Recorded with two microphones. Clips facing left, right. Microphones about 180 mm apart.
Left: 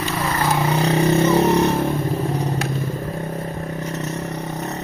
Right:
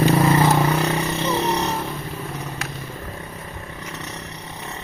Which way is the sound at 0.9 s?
45° left (ahead or behind).